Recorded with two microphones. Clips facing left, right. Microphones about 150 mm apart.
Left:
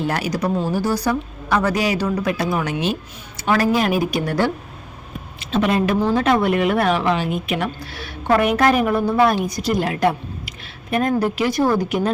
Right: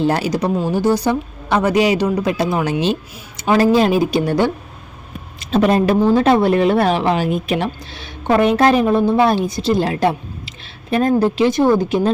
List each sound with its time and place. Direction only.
0.0 s a woman's voice: 30° right (ahead or behind)
5.4 s a woman's voice: 40° right (ahead or behind)
7.8 s a woman's voice: 20° right (ahead or behind)